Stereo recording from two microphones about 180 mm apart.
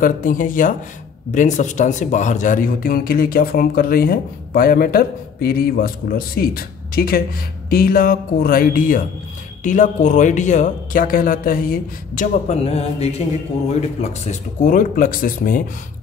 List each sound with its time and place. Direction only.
0.0 s speech: 50° left (ahead or behind)
12.4 s mantra: 35° left (ahead or behind)
13.7 s speech: 40° left (ahead or behind)